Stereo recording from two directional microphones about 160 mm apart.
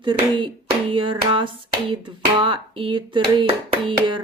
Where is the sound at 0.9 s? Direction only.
35° right (ahead or behind).